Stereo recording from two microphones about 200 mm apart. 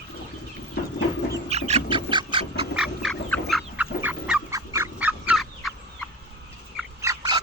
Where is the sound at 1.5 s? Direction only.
30° right (ahead or behind).